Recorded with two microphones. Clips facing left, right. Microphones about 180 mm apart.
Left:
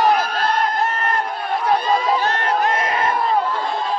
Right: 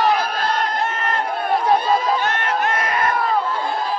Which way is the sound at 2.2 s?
35° left (ahead or behind).